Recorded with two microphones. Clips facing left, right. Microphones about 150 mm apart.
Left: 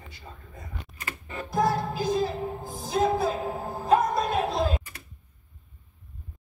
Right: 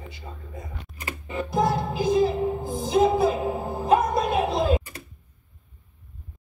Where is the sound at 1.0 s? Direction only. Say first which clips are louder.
Right 6 dB; 20° right (ahead or behind).